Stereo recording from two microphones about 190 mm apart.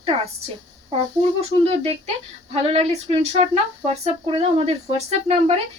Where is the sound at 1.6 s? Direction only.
35° right (ahead or behind).